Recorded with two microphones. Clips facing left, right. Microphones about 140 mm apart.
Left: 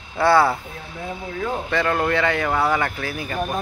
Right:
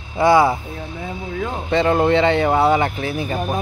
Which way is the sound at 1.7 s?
20° right (ahead or behind).